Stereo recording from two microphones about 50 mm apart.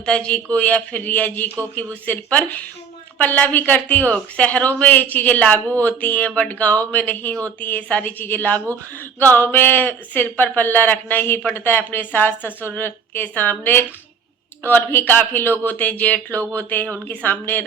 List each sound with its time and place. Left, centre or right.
0.0 s a man's voice: left
8.0 s a man's voice: left
13.2 s a man's voice: left